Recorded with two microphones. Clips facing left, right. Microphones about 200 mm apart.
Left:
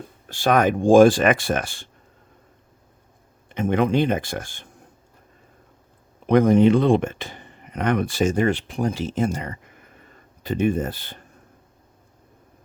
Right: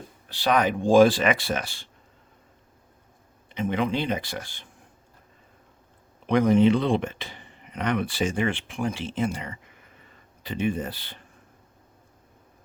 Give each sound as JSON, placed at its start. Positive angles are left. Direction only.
{"t": 0.3, "sound": "speech", "side_deg": 50}
{"t": 3.5, "sound": "speech", "side_deg": 50}
{"t": 6.2, "sound": "speech", "side_deg": 45}